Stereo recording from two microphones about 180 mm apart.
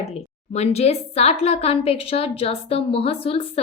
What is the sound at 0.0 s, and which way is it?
A woman's voice, 35° left (ahead or behind).